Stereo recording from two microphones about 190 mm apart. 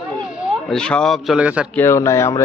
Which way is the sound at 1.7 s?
15° left (ahead or behind).